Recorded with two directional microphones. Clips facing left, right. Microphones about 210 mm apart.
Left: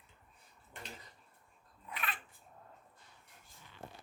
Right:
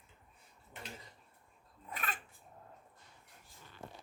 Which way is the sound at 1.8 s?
45° right (ahead or behind).